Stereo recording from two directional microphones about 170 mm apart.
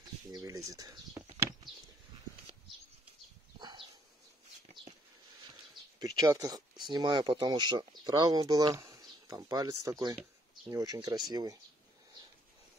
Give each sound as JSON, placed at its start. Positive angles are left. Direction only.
{"t": 0.3, "sound": "speech", "side_deg": -20}
{"t": 3.5, "sound": "a sound", "side_deg": -25}
{"t": 5.9, "sound": "speech", "side_deg": -20}